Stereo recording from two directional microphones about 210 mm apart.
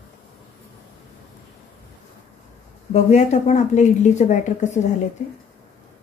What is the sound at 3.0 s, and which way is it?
A woman's voice, 35° left (ahead or behind).